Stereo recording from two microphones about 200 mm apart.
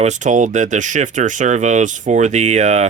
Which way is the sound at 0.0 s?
35° right (ahead or behind).